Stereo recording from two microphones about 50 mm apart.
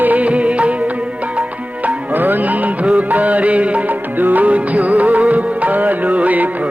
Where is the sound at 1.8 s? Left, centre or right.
Right.